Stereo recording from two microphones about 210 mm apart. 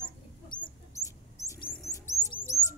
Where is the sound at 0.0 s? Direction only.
20° left (ahead or behind).